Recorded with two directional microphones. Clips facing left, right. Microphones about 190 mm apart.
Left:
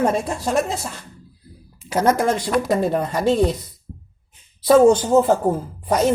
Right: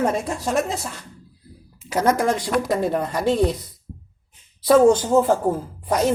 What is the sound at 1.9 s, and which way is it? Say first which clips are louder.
A woman's voice: left 1 dB; 30° left (ahead or behind).